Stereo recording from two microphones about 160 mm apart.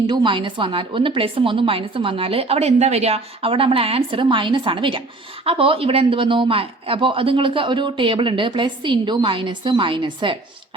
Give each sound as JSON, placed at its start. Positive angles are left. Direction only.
{"t": 0.1, "sound": "a woman's voice", "side_deg": -30}